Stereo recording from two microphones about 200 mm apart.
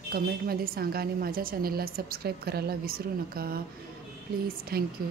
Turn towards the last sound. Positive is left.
turn(degrees=-50)  # may be behind; listen again after turning